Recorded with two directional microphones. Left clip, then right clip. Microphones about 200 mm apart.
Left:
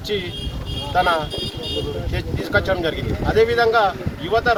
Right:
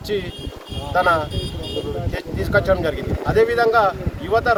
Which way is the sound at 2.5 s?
20° right (ahead or behind).